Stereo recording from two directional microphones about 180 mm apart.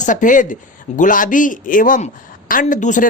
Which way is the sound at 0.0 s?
45° left (ahead or behind).